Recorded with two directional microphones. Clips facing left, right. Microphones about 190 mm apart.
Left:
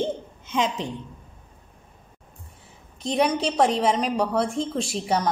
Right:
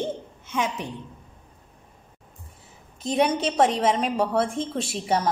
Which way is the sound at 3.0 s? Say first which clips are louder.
Even; centre (ahead or behind).